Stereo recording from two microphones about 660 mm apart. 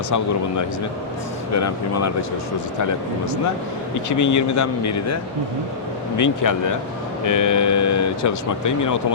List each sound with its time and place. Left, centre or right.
1.5 s speech: left
4.2 s speech: left